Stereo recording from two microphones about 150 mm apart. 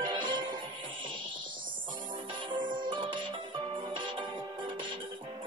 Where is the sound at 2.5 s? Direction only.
30° right (ahead or behind).